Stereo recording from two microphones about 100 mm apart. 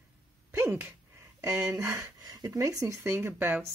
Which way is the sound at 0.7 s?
25° right (ahead or behind).